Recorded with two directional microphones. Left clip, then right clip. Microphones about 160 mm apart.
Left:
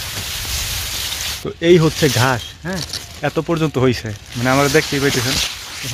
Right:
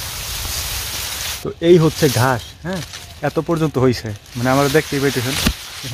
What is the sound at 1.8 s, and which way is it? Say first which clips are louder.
Speech: even; 15° left (ahead or behind).